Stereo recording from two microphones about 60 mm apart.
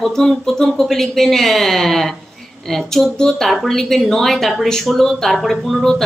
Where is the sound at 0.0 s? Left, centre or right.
Centre.